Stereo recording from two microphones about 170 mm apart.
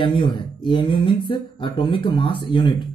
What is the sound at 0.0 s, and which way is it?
Speech, 30° left (ahead or behind).